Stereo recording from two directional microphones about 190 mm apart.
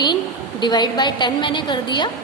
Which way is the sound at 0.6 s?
25° left (ahead or behind).